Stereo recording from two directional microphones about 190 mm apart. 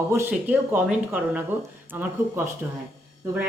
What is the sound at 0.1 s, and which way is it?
A man's voice, 10° right (ahead or behind).